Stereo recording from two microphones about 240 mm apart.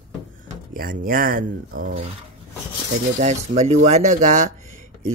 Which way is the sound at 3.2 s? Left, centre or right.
Right.